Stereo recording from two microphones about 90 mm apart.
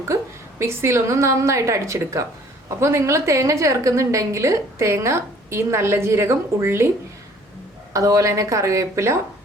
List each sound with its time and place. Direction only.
0.6 s a woman's voice: 30° right (ahead or behind)
7.9 s a woman's voice: 35° right (ahead or behind)